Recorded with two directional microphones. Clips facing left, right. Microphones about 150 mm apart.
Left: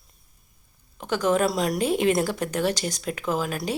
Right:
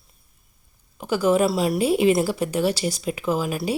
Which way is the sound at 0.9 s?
10° right (ahead or behind).